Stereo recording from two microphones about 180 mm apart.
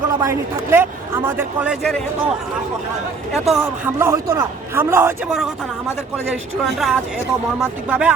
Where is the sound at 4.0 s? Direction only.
15° right (ahead or behind).